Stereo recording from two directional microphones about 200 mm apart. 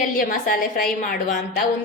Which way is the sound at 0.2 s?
45° left (ahead or behind).